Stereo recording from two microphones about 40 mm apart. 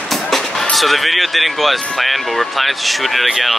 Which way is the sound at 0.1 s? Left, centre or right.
Centre.